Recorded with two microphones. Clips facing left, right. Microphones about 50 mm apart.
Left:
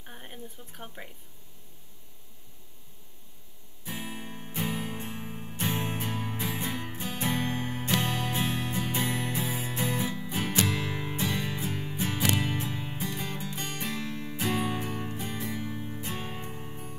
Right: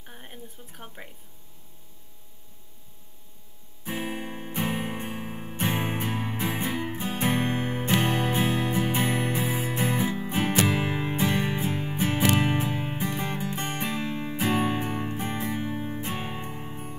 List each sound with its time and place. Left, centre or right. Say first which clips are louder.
0.0 s a woman's voice: even; centre
3.8 s music: right 6 dB; right